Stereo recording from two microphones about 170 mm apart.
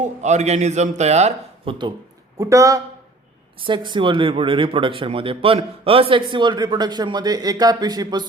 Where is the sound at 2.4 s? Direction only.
20° right (ahead or behind).